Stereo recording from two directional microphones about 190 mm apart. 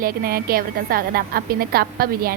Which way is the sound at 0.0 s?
50° right (ahead or behind).